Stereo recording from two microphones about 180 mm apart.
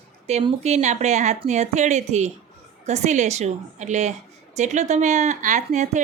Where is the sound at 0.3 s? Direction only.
35° right (ahead or behind).